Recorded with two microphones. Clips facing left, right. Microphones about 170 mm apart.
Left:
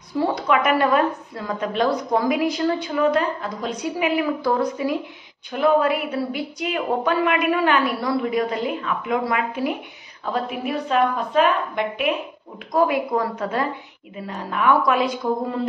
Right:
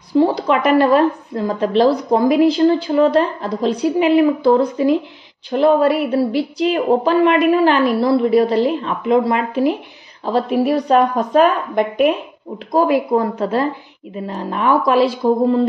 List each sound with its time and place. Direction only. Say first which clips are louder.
0.1 s a woman's voice: right 6 dB; 30° right (ahead or behind)
12.7 s a woman's voice: right 5 dB; 30° right (ahead or behind)